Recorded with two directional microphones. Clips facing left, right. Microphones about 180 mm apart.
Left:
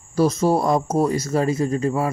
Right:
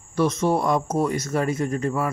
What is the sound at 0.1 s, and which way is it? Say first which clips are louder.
Speech: left 3 dB; 35° left (ahead or behind).